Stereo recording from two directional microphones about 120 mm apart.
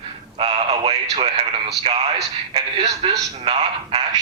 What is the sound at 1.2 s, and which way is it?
Speech, 50° right (ahead or behind).